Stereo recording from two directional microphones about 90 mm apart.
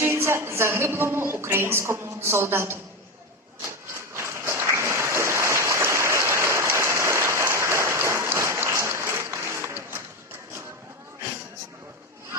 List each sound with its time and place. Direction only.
0.0 s a woman's voice: 30° right (ahead or behind)
4.1 s applause: 30° right (ahead or behind)